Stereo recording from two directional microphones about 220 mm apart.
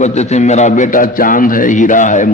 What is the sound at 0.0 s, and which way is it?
A man's voice, 30° left (ahead or behind).